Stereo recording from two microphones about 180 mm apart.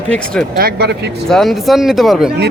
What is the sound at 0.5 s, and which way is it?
Speech, 60° right (ahead or behind).